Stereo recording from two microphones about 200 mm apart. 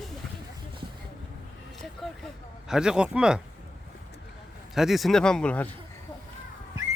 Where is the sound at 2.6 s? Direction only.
5° right (ahead or behind).